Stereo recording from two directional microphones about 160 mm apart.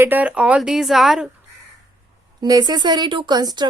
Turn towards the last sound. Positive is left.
turn(degrees=-25)  # may be behind; listen again after turning